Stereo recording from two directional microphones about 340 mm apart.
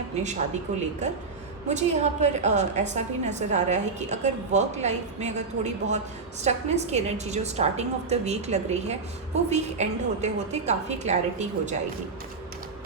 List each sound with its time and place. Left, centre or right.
0.7 s a woman's voice: right